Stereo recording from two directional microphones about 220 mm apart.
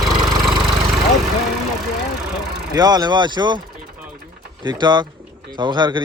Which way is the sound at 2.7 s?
15° right (ahead or behind).